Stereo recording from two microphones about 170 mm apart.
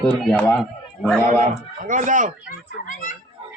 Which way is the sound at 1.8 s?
50° right (ahead or behind).